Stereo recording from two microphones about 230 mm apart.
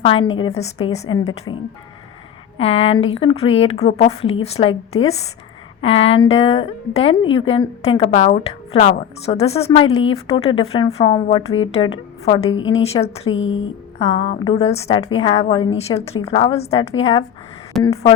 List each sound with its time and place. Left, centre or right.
0.0 s speech: left
2.6 s speech: left
5.8 s speech: left
12.5 s a woman's voice: left
12.8 s speech: left
13.3 s a woman's voice: left
14.0 s speech: left